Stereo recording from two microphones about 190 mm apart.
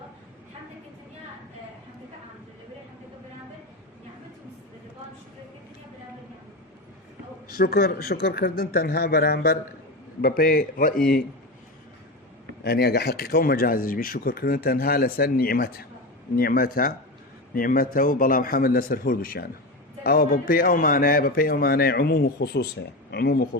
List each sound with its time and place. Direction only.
7.5 s a man's voice: 55° left (ahead or behind)
12.6 s a man's voice: 60° left (ahead or behind)